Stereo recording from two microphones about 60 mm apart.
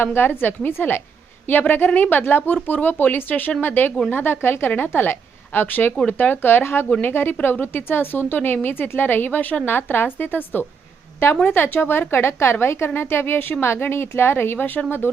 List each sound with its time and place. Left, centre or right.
0.0 s a woman's voice: left